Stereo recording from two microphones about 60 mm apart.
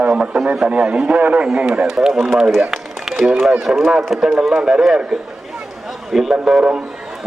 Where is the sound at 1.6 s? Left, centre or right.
Centre.